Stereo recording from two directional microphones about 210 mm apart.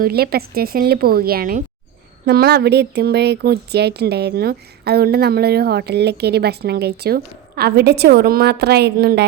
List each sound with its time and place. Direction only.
0.0 s speech: 45° right (ahead or behind)